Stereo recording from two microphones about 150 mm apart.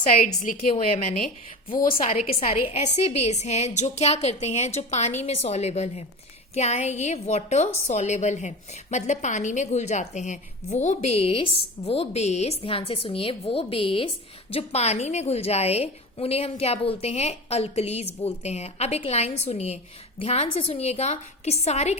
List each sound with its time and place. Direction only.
0.2 s a woman's voice: 60° left (ahead or behind)
0.7 s a woman's voice: 45° left (ahead or behind)
1.7 s a woman's voice: 70° left (ahead or behind)
2.7 s a woman's voice: 45° left (ahead or behind)